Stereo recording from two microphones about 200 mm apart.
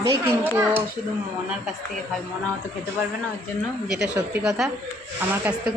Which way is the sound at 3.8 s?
5° right (ahead or behind).